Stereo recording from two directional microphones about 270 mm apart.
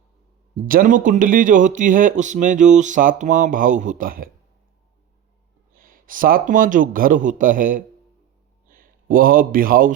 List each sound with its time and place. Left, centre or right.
0.5 s speech: right
5.7 s speech: right